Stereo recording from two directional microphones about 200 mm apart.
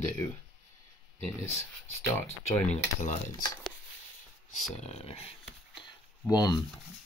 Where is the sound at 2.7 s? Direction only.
35° left (ahead or behind).